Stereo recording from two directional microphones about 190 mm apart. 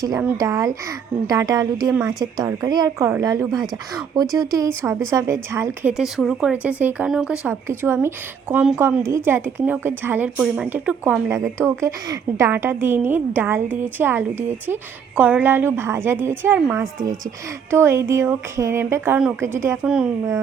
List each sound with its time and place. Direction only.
0.3 s speech: 20° right (ahead or behind)
1.9 s a woman's voice: 5° right (ahead or behind)
2.1 s speech: 20° right (ahead or behind)
5.9 s speech: centre (ahead or behind)
17.7 s speech: 15° right (ahead or behind)